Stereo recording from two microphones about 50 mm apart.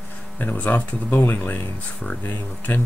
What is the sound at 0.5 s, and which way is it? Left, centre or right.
Speech, left.